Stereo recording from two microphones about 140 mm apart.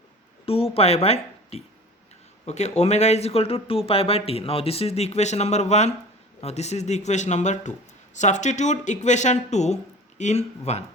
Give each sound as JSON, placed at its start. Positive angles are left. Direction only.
{"t": 0.4, "sound": "speech", "side_deg": 45}